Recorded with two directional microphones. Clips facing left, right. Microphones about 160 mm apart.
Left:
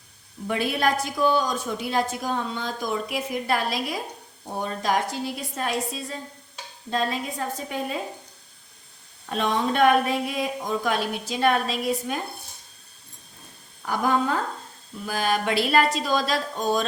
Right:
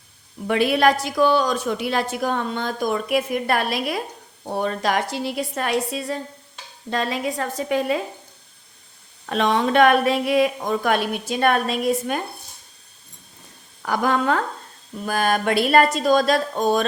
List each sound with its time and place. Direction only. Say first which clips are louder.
0.4 s a woman's voice: right 6 dB; 85° right; by 4.0 s 65° right (ahead or behind)
4.4 s a woman's voice: right 4 dB; 75° right (ahead or behind)
6.9 s a woman's voice: right 3 dB; 80° right
9.3 s a woman's voice: right 5 dB; 85° right; by 12.2 s 55° right (ahead or behind)
13.8 s a woman's voice: right 3 dB; 90° right
15.0 s a woman's voice: right 4 dB; 55° right (ahead or behind)